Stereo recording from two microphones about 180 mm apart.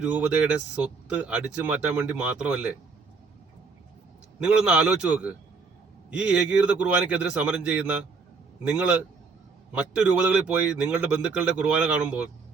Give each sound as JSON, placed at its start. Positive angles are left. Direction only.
{"t": 0.0, "sound": "speech", "side_deg": -5}
{"t": 4.4, "sound": "speech", "side_deg": -5}